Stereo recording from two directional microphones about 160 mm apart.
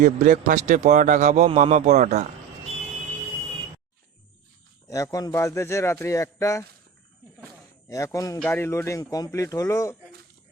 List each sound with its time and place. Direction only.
0.0 s a man's voice: 50° right (ahead or behind)
5.1 s speech: 20° left (ahead or behind)
7.9 s speech: 20° left (ahead or behind)